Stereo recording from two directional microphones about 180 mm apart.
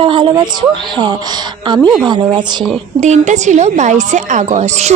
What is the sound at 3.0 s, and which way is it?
A woman's voice, 40° right (ahead or behind).